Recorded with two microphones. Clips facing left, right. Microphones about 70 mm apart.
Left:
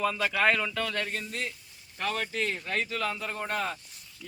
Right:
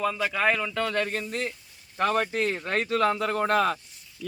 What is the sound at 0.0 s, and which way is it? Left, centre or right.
Speech, centre.